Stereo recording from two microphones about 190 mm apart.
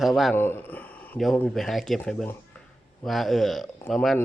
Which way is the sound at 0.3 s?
10° left (ahead or behind).